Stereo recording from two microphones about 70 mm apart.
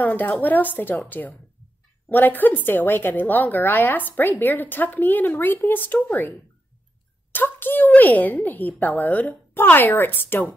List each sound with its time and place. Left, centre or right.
0.0 s a woman's voice: left
7.3 s a woman's voice: left